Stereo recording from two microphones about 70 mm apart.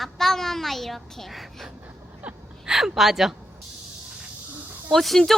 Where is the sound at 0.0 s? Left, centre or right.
Centre.